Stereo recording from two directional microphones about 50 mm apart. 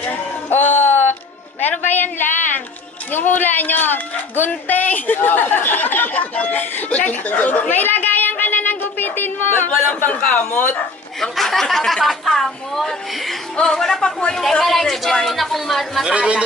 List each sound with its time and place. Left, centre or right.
0.5 s a sound: left
3.1 s a child's voice: left
11.1 s a woman's voice: centre
16.1 s speech: right